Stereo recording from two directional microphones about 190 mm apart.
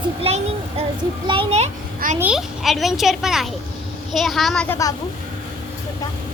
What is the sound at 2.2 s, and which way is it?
Speech, 5° right (ahead or behind).